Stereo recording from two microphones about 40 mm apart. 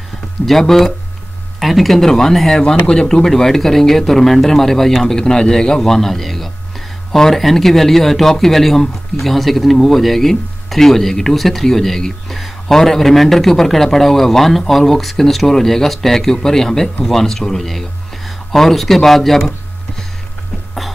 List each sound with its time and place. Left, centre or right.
0.5 s speech: centre
3.3 s speech: centre